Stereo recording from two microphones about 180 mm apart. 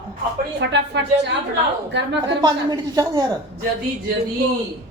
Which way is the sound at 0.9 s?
70° right (ahead or behind).